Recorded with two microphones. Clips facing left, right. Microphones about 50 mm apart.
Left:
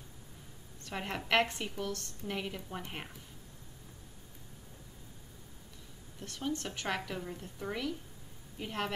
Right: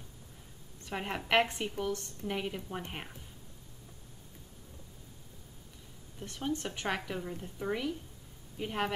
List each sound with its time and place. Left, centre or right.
0.8 s a woman's voice: centre
6.1 s a woman's voice: centre